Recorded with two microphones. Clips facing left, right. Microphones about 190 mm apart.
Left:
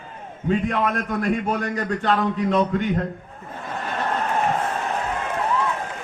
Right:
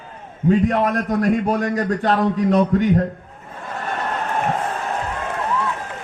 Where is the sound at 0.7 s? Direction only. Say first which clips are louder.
Right 4 dB; 35° right (ahead or behind).